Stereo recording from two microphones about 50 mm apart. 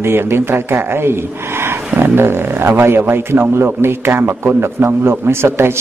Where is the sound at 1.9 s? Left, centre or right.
Right.